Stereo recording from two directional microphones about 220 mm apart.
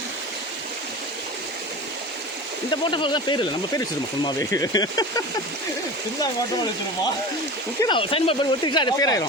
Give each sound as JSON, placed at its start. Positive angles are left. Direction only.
{"t": 2.6, "sound": "speech", "side_deg": 20}
{"t": 7.8, "sound": "speech", "side_deg": 20}